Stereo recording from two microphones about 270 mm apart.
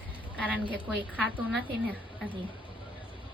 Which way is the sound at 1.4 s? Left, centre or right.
Centre.